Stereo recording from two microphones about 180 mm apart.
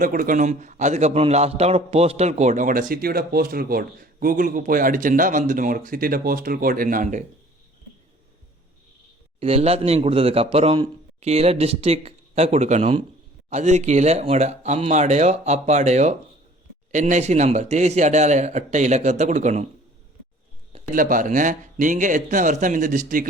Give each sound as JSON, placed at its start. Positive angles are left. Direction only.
{"t": 0.0, "sound": "a man's voice", "side_deg": -50}
{"t": 9.4, "sound": "a man's voice", "side_deg": -35}
{"t": 20.9, "sound": "a man's voice", "side_deg": -50}